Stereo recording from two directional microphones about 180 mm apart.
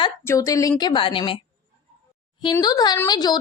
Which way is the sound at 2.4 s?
25° left (ahead or behind).